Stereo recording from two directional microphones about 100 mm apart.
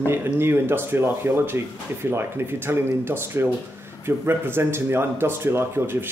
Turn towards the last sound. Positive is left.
turn(degrees=-25)  # may be behind; listen again after turning